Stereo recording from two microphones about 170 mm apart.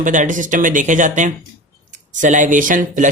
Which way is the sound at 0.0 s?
50° right (ahead or behind).